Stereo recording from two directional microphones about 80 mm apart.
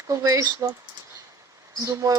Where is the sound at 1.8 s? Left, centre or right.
Right.